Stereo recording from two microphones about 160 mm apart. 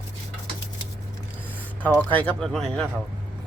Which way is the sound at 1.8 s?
10° left (ahead or behind).